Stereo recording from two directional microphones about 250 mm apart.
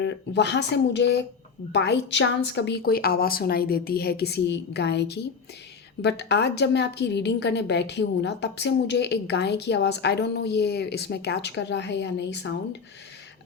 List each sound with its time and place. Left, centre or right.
0.0 s a woman's voice: left